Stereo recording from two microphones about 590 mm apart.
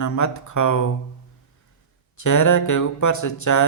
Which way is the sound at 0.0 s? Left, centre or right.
Left.